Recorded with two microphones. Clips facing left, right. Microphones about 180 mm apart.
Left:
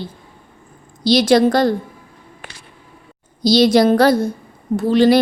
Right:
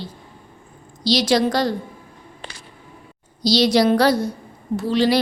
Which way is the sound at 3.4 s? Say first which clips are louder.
Left 4 dB; 50° left (ahead or behind).